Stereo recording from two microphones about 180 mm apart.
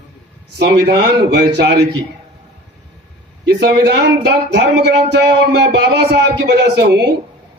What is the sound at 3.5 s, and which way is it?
A man's voice, 65° right (ahead or behind).